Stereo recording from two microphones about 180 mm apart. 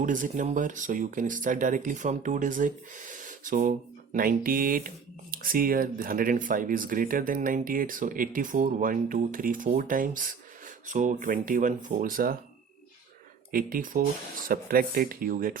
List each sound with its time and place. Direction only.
0.0 s speech: 45° right (ahead or behind)
13.5 s speech: 50° right (ahead or behind)